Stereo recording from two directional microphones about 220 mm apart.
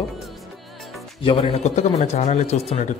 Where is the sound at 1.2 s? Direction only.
25° left (ahead or behind).